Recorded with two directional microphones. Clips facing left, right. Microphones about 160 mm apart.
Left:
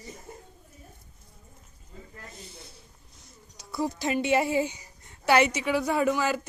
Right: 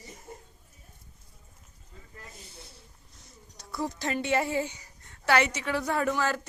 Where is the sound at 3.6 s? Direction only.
10° left (ahead or behind).